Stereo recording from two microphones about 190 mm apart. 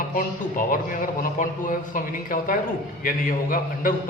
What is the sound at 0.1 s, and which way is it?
A man's voice, 45° left (ahead or behind).